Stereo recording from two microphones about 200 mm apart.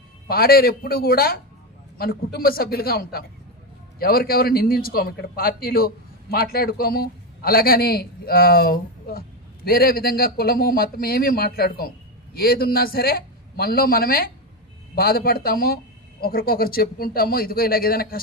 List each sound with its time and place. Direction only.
0.3 s a man's voice: 50° left (ahead or behind)